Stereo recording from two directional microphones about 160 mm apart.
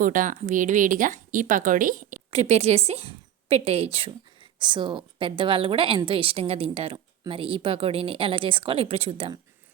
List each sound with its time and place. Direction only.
0.0 s speech: 55° right (ahead or behind)
2.3 s a woman's voice: 40° right (ahead or behind)